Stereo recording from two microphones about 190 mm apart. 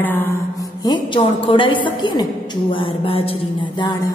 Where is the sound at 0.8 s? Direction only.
25° left (ahead or behind).